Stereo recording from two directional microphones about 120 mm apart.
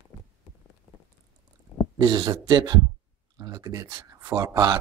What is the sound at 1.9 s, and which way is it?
Speech, 35° right (ahead or behind).